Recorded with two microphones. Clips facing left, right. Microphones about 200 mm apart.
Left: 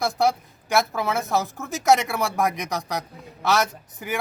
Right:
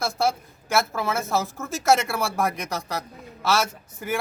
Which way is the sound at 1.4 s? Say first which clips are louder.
Left 1 dB; centre (ahead or behind).